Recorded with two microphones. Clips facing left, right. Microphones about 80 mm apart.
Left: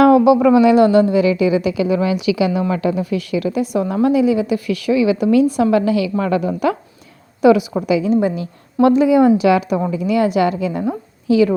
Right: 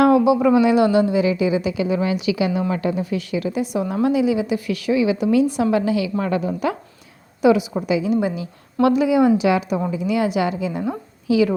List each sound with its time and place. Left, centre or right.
0.0 s a man's voice: left
0.8 s a woman's voice: left
1.2 s a woman's voice: left
3.8 s a woman's voice: left
6.5 s a woman's voice: left
7.4 s a woman's voice: left
7.9 s speech: left
8.2 s a woman's voice: left
9.5 s a woman's voice: left
11.3 s a woman's voice: left